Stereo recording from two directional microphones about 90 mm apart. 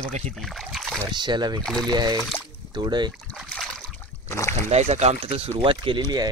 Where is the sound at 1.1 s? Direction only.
55° right (ahead or behind).